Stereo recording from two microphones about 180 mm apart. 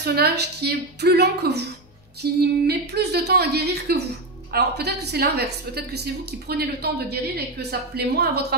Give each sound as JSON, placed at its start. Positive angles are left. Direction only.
{"t": 0.0, "sound": "a woman's voice", "side_deg": -60}